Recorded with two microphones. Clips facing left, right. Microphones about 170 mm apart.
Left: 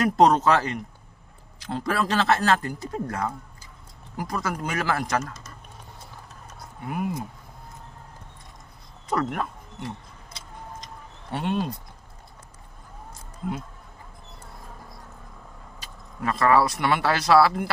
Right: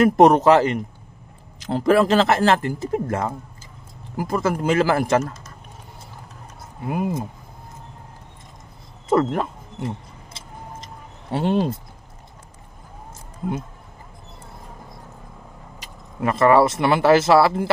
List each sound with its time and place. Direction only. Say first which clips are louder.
0.0 s speech: right 5 dB; 20° right (ahead or behind)
6.9 s speech: right 5 dB; 25° right (ahead or behind)
9.1 s speech: right 7 dB; 25° right (ahead or behind)
9.8 s a sound: right 6 dB; 25° right (ahead or behind)
13.4 s speech: right 4 dB; 25° right (ahead or behind)
15.8 s speech: right 6 dB; 20° right (ahead or behind)